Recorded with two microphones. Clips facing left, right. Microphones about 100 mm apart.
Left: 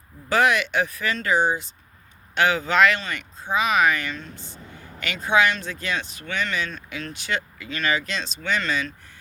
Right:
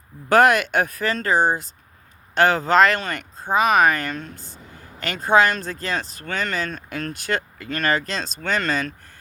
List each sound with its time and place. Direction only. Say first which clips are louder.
0.3 s speech: right 5 dB; 45° right (ahead or behind)